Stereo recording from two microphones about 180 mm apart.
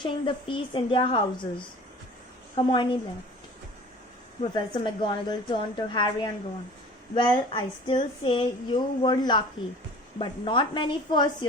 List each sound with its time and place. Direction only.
0.0 s speech: 30° left (ahead or behind)
4.5 s speech: 25° left (ahead or behind)